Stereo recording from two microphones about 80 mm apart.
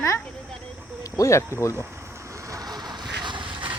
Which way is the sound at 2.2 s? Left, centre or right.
Right.